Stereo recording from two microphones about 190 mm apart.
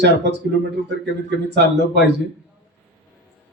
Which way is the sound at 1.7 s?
65° right (ahead or behind).